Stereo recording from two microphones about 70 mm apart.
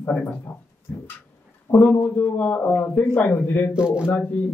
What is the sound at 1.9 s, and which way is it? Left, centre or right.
Speech, left.